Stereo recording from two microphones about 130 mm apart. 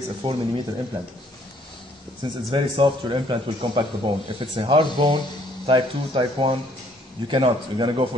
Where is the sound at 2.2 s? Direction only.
40° right (ahead or behind).